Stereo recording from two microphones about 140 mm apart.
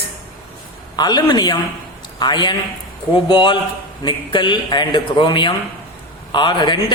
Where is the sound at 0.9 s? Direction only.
30° left (ahead or behind).